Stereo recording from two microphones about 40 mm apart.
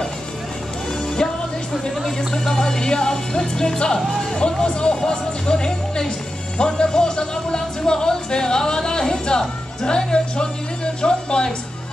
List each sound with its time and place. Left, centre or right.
1.1 s speech: centre